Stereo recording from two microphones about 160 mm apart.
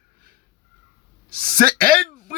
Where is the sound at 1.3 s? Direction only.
65° right (ahead or behind).